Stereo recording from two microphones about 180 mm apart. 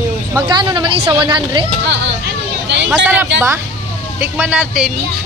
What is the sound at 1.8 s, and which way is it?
Speech, 75° right (ahead or behind).